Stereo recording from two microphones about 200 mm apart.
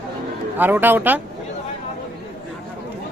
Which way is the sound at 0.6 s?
10° right (ahead or behind).